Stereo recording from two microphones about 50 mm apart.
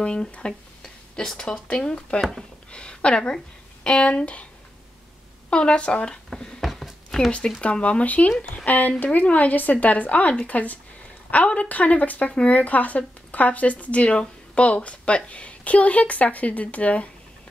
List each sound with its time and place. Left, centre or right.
0.0 s speech: centre
0.5 s a sound: centre
1.7 s a woman's voice: centre
5.5 s speech: left
6.6 s a sound: centre
7.2 s a woman's voice: centre